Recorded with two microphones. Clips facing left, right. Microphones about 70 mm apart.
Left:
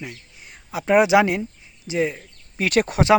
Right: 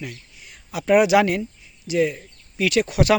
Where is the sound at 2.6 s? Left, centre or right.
Left.